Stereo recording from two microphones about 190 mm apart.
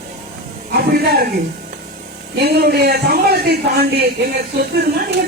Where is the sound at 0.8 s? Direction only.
55° right (ahead or behind).